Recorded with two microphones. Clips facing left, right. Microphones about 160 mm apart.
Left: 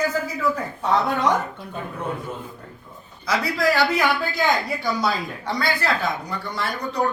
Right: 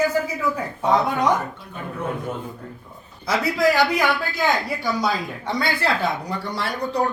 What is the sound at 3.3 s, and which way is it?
Speech, 15° right (ahead or behind).